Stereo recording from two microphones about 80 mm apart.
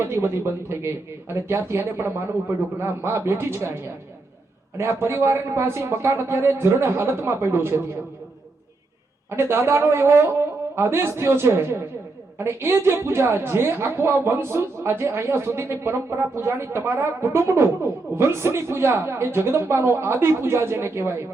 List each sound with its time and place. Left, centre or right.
0.0 s a woman's voice: right
4.8 s a woman's voice: right
9.3 s a woman's voice: right